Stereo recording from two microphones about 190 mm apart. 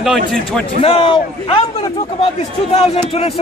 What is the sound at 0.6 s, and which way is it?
A man's voice, 30° left (ahead or behind).